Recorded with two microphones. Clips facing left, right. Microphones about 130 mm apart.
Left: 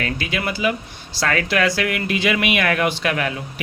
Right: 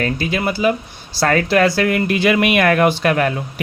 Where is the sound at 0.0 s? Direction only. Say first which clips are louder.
Right 5 dB; 40° right (ahead or behind).